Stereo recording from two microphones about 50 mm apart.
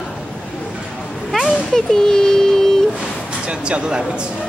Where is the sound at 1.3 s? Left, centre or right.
Centre.